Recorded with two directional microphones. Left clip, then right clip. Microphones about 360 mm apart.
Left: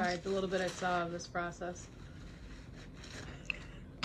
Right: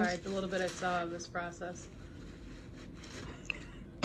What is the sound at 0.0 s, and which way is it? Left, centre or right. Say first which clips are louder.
Speech: even; left.